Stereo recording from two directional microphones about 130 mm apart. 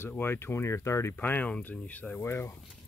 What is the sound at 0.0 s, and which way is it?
Speech, 15° left (ahead or behind).